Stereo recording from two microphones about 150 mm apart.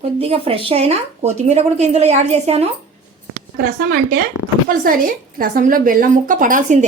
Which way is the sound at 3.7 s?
75° right (ahead or behind).